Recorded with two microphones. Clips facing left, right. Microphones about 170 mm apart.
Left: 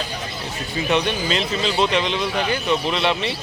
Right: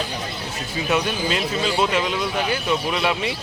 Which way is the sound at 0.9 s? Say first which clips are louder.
Left 1 dB; 5° right (ahead or behind).